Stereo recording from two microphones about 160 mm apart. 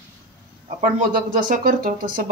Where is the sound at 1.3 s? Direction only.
60° right (ahead or behind).